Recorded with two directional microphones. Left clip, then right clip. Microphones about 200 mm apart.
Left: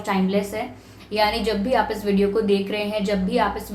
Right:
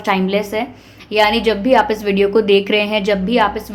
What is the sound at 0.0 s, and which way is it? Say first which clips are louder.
A woman's voice: right 6 dB; 45° right (ahead or behind).